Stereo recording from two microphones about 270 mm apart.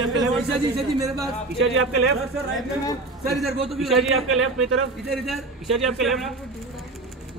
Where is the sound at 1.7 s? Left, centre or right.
Right.